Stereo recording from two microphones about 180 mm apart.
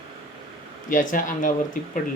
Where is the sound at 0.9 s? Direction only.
45° left (ahead or behind).